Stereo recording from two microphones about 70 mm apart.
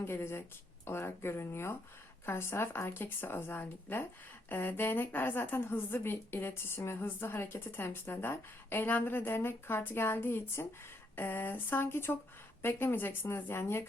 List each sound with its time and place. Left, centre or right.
0.0 s a woman's voice: left